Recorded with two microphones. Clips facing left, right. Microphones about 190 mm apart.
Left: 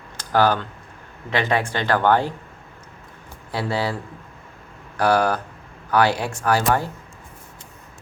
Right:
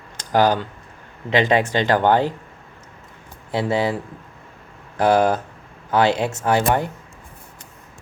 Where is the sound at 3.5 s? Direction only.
20° right (ahead or behind).